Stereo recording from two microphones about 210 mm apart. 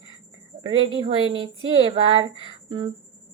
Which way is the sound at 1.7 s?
25° right (ahead or behind).